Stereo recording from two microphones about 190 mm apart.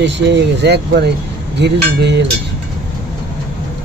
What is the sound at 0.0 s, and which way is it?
Speech, 65° right (ahead or behind).